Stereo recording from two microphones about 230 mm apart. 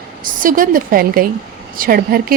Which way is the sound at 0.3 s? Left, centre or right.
Right.